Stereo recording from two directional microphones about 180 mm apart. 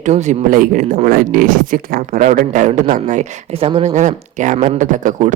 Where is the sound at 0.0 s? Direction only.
40° right (ahead or behind).